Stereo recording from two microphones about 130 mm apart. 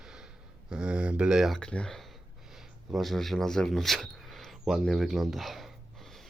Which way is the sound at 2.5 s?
Centre (ahead or behind).